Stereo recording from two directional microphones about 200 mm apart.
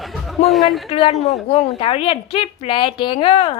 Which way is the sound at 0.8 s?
30° left (ahead or behind).